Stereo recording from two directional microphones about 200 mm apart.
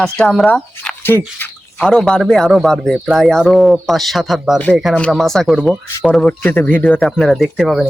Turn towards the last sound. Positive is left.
turn(degrees=0)  # may be behind; listen again after turning